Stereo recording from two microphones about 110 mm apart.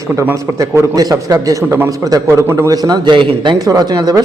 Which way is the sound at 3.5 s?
35° right (ahead or behind).